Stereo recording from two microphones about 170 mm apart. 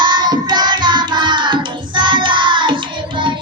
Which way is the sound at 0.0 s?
25° right (ahead or behind).